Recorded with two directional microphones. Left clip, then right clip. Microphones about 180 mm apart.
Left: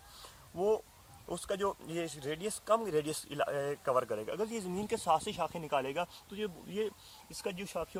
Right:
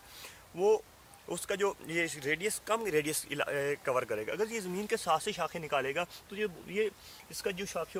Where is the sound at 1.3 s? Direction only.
15° right (ahead or behind).